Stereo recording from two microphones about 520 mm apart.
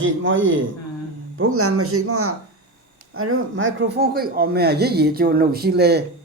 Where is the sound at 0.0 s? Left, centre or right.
Right.